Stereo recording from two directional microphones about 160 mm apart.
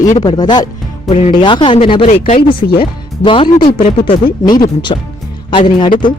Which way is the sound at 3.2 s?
30° left (ahead or behind).